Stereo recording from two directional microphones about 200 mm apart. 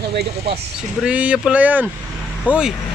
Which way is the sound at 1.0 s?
5° right (ahead or behind).